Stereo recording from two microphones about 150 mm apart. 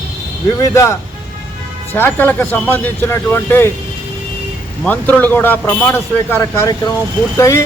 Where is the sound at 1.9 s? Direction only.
15° left (ahead or behind).